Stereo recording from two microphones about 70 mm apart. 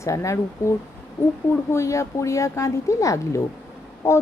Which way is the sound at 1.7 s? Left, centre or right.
Left.